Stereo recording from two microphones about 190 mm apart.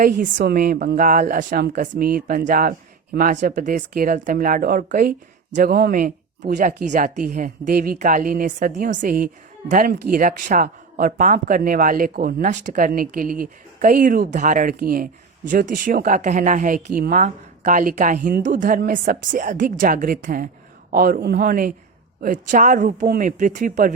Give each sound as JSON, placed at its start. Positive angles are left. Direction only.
{"t": 0.0, "sound": "a woman's voice", "side_deg": -45}